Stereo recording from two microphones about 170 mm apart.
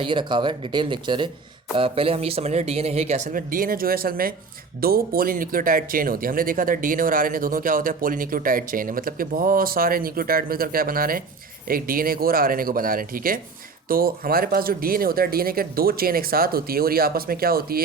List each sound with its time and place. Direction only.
0.0 s speech: 30° right (ahead or behind); by 17.8 s 60° right (ahead or behind)